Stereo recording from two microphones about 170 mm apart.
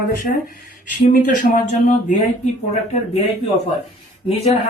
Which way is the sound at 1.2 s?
50° left (ahead or behind).